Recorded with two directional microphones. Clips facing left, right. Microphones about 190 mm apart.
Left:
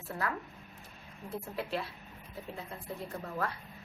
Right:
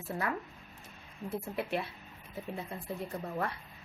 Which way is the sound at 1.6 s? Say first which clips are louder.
Right 1 dB; 20° right (ahead or behind).